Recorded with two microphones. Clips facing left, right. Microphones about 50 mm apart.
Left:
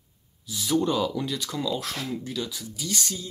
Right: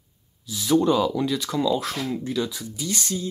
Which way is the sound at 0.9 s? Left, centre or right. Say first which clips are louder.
Right 5 dB; centre.